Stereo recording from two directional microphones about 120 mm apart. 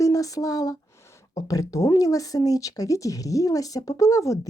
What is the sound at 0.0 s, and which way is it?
Speech, 30° left (ahead or behind).